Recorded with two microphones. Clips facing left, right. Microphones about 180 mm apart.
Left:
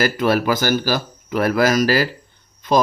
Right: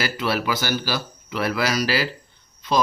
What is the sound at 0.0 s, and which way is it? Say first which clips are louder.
Speech: left 7 dB; 50° left (ahead or behind).